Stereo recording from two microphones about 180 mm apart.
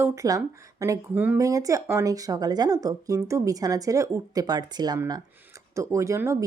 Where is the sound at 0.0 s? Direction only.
15° right (ahead or behind).